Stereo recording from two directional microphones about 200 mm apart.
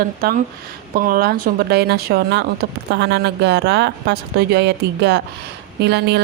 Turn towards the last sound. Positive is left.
turn(degrees=-55)  # may be behind; listen again after turning